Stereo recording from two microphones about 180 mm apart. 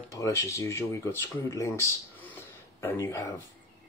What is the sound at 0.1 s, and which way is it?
Speech, 15° left (ahead or behind).